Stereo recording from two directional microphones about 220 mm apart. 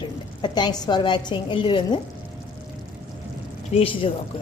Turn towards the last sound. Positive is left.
turn(degrees=25)  # may be behind; listen again after turning